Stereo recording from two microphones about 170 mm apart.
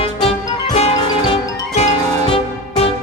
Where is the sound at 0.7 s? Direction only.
40° left (ahead or behind).